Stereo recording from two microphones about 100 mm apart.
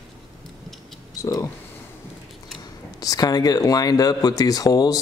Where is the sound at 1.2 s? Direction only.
30° left (ahead or behind).